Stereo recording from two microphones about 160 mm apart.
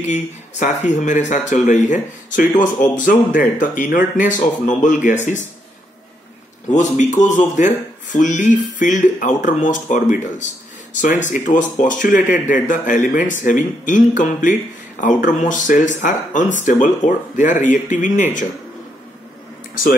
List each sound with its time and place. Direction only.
0.0 s speech: 50° left (ahead or behind)
6.7 s speech: 50° left (ahead or behind)